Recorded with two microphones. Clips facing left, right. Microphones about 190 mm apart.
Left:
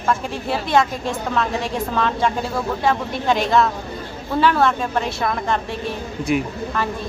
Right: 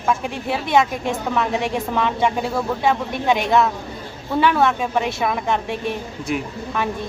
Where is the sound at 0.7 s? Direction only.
20° right (ahead or behind).